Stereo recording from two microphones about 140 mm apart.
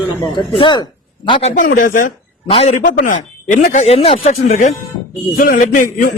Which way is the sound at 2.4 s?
45° left (ahead or behind).